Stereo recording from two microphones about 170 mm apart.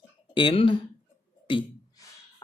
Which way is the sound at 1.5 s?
25° left (ahead or behind).